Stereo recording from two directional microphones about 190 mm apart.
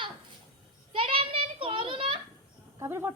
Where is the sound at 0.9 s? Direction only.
30° right (ahead or behind).